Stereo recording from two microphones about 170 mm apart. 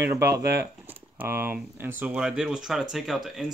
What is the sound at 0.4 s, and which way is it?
Speech, 80° right.